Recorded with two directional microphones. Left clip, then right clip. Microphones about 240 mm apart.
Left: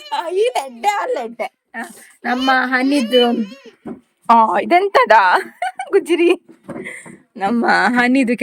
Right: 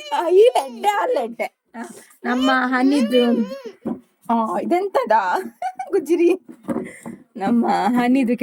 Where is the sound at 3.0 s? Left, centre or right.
Centre.